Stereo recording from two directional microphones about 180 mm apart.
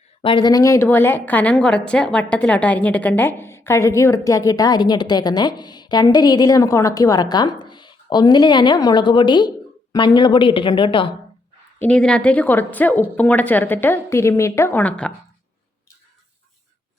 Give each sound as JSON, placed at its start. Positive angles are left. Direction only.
{"t": 0.2, "sound": "a woman's voice", "side_deg": 30}
{"t": 11.8, "sound": "a woman's voice", "side_deg": 5}